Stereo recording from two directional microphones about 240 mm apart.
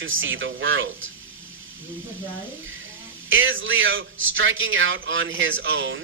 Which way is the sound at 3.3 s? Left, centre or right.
Right.